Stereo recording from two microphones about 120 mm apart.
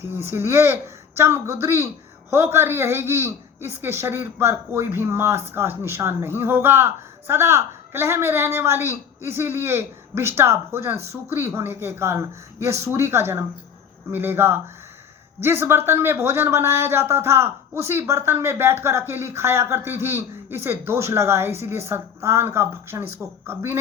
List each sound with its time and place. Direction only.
0.0 s speech: 20° right (ahead or behind)